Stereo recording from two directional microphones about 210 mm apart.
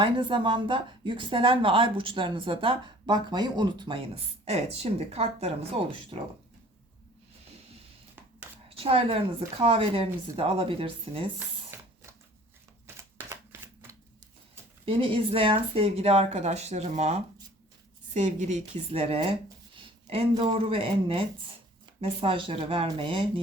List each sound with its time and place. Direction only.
0.0 s speech: 25° right (ahead or behind)
8.7 s speech: 25° right (ahead or behind)
11.7 s a sound: 10° right (ahead or behind)
13.0 s typewriter: 10° right (ahead or behind)
14.8 s a woman's voice: 25° right (ahead or behind)